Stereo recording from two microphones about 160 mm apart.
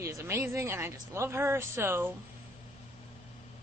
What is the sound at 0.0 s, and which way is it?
A woman's voice, 15° right (ahead or behind).